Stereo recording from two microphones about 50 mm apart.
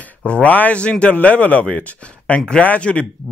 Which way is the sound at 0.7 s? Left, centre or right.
Left.